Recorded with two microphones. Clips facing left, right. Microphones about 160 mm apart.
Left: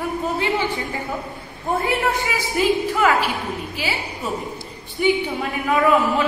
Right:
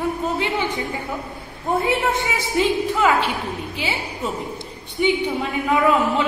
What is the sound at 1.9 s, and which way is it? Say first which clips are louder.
Speech: right 1 dB; 20° right (ahead or behind).